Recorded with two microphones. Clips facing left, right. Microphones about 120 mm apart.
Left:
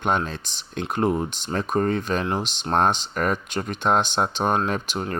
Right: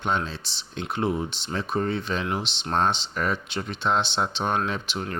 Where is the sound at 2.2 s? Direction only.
35° left (ahead or behind).